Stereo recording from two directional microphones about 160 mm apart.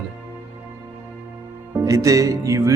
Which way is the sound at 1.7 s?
20° right (ahead or behind).